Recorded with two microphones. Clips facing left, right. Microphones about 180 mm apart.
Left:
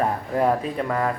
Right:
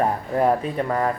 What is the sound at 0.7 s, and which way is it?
Speech, 25° right (ahead or behind).